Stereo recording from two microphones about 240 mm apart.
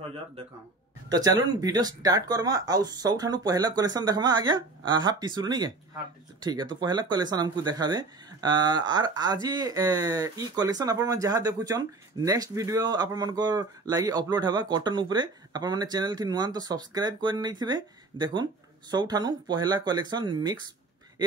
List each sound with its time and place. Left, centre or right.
1.0 s speech: centre